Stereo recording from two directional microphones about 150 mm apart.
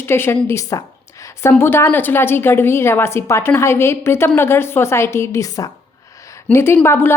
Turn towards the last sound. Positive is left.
turn(degrees=15)  # may be behind; listen again after turning